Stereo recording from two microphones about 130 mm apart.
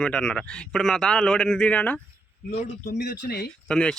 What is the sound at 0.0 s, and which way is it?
A man's voice, 5° left (ahead or behind).